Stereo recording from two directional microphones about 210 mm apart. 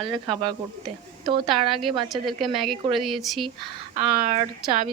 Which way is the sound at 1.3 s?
20° right (ahead or behind).